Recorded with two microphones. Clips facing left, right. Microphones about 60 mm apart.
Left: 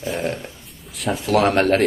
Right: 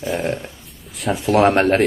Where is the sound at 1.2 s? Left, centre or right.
Right.